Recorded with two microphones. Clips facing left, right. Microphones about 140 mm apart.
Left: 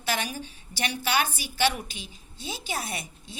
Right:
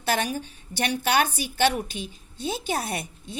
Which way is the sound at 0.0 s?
50° right (ahead or behind).